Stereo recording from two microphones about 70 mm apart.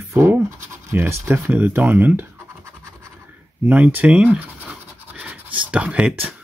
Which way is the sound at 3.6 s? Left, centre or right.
Right.